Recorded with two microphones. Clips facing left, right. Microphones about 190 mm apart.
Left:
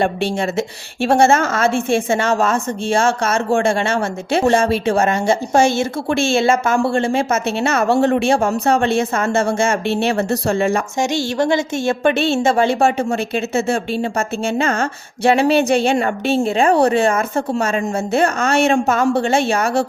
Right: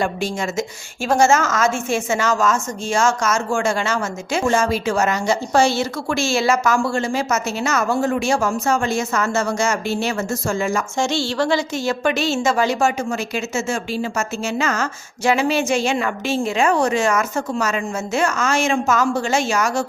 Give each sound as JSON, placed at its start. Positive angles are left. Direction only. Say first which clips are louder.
{"t": 1.0, "sound": "a woman's voice", "louder": "left 3 dB", "side_deg": 30}
{"t": 7.9, "sound": "speech", "louder": "left 7 dB", "side_deg": 70}
{"t": 8.3, "sound": "a woman's voice", "louder": "left 4 dB", "side_deg": 30}
{"t": 11.0, "sound": "a woman's voice", "louder": "left 2 dB", "side_deg": 20}
{"t": 12.1, "sound": "speech", "louder": "left 4 dB", "side_deg": 55}
{"t": 12.4, "sound": "speech", "louder": "left 2 dB", "side_deg": 30}